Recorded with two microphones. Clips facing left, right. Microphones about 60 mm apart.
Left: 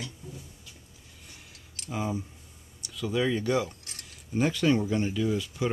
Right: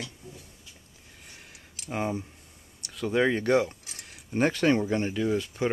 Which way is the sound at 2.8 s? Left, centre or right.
Right.